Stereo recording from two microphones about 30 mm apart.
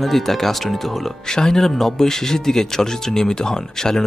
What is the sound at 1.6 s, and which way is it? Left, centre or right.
Speech, centre.